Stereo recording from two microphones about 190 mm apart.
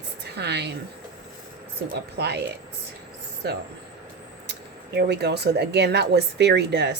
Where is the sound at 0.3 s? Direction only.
60° right (ahead or behind).